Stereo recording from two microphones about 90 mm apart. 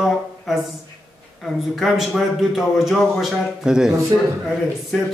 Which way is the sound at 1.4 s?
Centre (ahead or behind).